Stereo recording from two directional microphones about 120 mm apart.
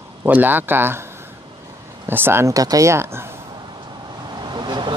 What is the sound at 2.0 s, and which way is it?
Speech, 20° right (ahead or behind).